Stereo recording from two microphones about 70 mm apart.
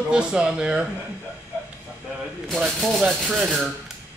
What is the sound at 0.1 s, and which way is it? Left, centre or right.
Speech, centre.